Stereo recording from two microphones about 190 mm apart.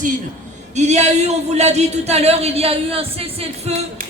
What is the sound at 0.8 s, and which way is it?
A man's voice, 35° right (ahead or behind).